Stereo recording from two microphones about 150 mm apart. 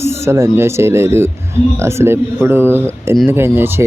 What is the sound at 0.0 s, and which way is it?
Speech, 20° right (ahead or behind).